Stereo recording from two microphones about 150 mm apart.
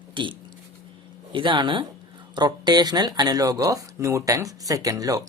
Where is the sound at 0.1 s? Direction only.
35° right (ahead or behind).